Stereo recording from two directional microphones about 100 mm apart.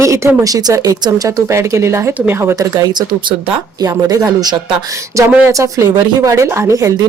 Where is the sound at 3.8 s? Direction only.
40° right (ahead or behind).